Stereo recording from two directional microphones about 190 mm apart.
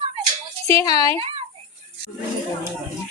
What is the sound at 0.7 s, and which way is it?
Speech, 20° left (ahead or behind).